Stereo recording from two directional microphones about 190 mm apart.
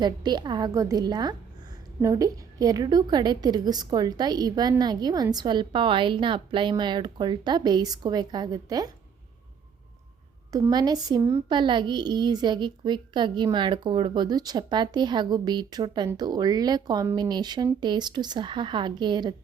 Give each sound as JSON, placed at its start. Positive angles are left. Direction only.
{"t": 0.0, "sound": "a child's voice", "side_deg": -25}
{"t": 10.5, "sound": "a child's voice", "side_deg": -20}